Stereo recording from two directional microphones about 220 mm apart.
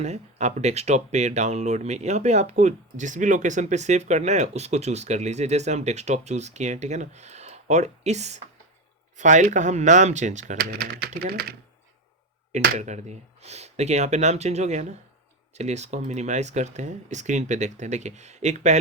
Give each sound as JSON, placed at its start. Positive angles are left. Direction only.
{"t": 0.0, "sound": "speech", "side_deg": -30}
{"t": 12.5, "sound": "speech", "side_deg": -30}